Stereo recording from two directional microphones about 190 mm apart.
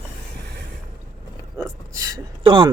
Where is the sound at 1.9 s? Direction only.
20° right (ahead or behind).